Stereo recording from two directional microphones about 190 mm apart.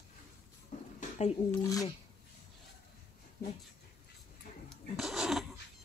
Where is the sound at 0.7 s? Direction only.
40° left (ahead or behind).